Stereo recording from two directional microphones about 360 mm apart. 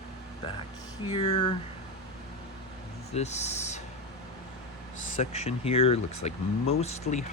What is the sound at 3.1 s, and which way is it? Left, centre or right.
Speech, centre.